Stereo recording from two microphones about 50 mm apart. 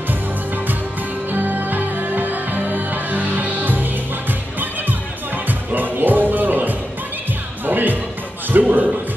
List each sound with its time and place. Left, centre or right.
1.3 s music: right